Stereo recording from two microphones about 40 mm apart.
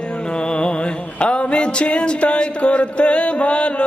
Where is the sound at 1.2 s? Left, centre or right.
Left.